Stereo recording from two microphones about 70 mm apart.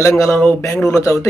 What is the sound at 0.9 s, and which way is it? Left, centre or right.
Speech, left.